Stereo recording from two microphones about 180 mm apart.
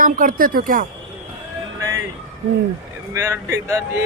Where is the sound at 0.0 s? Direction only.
50° right (ahead or behind).